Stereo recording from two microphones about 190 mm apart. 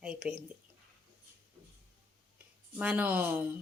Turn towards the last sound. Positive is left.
turn(degrees=-10)  # may be behind; listen again after turning